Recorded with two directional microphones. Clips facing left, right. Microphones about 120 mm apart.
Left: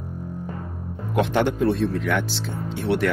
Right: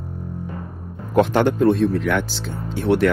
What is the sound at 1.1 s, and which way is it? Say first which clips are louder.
Speech: right 5 dB; 50° right (ahead or behind).